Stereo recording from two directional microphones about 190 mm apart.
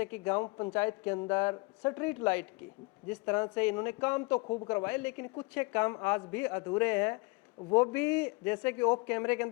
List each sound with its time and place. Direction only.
0.0 s a man's voice: 10° left (ahead or behind)
0.4 s a man's voice: 25° left (ahead or behind)
0.7 s a man's voice: 10° left (ahead or behind)
4.4 s a man's voice: 25° left (ahead or behind)
4.7 s a man's voice: 10° left (ahead or behind)